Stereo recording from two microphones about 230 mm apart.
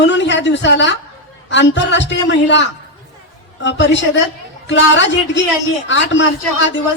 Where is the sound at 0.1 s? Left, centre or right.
Left.